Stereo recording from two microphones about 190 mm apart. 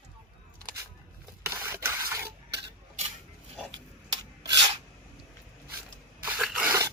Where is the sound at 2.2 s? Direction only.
60° right (ahead or behind).